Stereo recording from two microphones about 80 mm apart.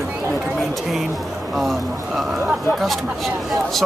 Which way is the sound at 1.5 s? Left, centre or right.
Centre.